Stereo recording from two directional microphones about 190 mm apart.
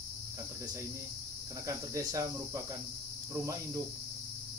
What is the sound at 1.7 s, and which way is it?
Cricket, 15° right (ahead or behind).